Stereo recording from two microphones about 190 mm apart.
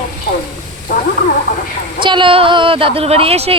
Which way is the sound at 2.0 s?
25° right (ahead or behind).